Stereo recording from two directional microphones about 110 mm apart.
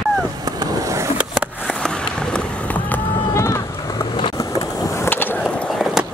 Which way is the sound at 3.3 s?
25° left (ahead or behind).